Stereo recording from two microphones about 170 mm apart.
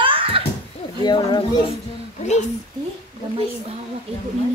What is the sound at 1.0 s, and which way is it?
Speech, 25° left (ahead or behind).